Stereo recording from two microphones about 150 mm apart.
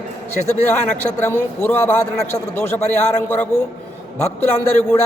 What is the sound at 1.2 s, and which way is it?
A man's voice, 15° left (ahead or behind).